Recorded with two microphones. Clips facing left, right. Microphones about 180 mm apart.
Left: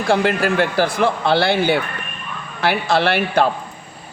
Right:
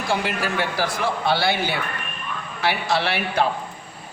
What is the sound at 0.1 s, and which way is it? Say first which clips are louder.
Speech: left 8 dB; 55° left (ahead or behind).